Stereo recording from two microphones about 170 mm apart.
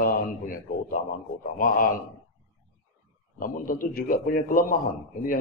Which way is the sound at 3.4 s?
50° left (ahead or behind).